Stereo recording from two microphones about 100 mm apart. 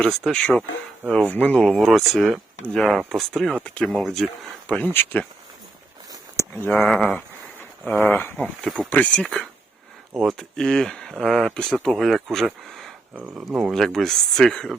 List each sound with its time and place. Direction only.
0.0 s speech: 5° left (ahead or behind)
1.6 s speech: centre (ahead or behind)
4.9 s speech: 20° left (ahead or behind)
6.7 s speech: 5° left (ahead or behind)
8.0 s speech: 20° left (ahead or behind)
8.6 s speech: centre (ahead or behind)
8.9 s speech: 15° left (ahead or behind)
9.2 s speech: 5° left (ahead or behind)
13.1 s speech: 15° right (ahead or behind); by 14.8 s 5° left (ahead or behind)